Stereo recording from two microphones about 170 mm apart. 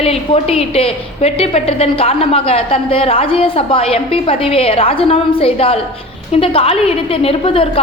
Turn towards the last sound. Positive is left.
turn(degrees=35)  # may be behind; listen again after turning